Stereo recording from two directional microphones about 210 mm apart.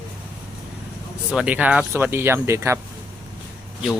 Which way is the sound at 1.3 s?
5° right (ahead or behind).